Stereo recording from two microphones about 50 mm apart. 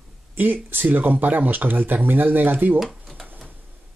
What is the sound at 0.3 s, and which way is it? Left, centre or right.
Speech, right.